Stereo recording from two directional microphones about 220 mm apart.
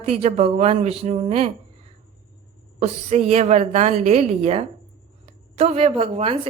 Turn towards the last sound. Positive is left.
turn(degrees=-25)  # may be behind; listen again after turning